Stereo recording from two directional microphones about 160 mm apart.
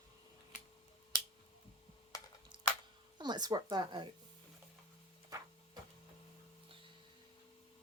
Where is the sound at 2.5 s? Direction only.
30° right (ahead or behind).